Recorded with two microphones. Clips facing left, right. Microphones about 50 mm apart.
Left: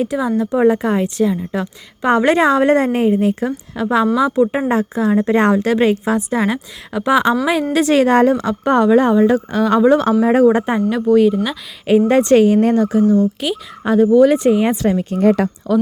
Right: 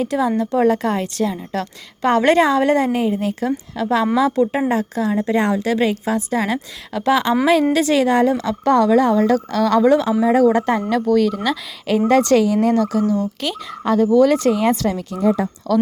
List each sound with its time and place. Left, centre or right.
0.0 s a woman's voice: centre
4.7 s a woman's voice: left
6.4 s a woman's voice: centre
9.9 s speech: left
10.2 s a woman's voice: left
10.6 s a woman's voice: centre
13.4 s speech: centre; by 15.2 s left
15.2 s speech: left
15.7 s a woman's voice: left